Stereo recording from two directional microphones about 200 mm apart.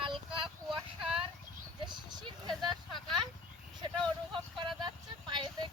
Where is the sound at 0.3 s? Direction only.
25° right (ahead or behind).